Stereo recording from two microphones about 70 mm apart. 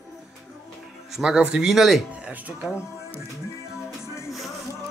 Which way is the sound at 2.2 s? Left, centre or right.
Right.